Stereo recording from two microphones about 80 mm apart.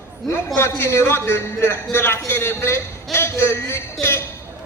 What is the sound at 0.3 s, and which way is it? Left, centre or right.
A man's voice, left.